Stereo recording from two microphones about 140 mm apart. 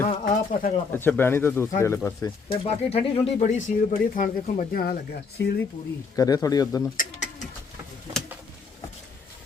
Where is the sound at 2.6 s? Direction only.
45° left (ahead or behind).